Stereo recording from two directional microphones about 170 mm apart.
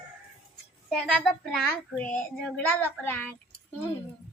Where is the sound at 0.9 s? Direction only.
Centre (ahead or behind).